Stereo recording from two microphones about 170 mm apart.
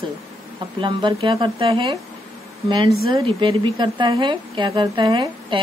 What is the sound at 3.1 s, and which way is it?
A woman's voice, 25° right (ahead or behind).